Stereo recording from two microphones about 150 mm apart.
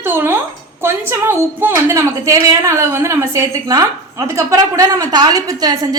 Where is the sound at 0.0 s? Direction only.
15° right (ahead or behind).